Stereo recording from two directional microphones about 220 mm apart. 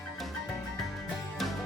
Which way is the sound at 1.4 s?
Centre (ahead or behind).